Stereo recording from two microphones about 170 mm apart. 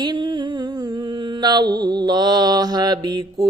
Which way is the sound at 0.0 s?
25° right (ahead or behind).